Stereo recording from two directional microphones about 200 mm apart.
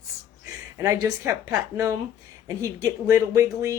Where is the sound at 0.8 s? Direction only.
15° right (ahead or behind).